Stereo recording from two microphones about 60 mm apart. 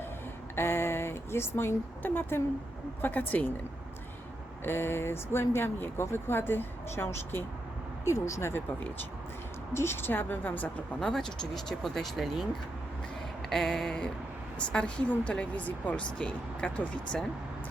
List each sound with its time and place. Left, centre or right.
0.5 s a sound: left
2.0 s speech: left
4.6 s speech: left
8.0 s speech: left
9.7 s speech: left
11.0 s speech: centre
13.5 s a sound: centre
14.7 s speech: centre